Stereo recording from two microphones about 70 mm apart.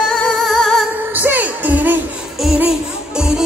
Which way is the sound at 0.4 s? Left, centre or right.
Centre.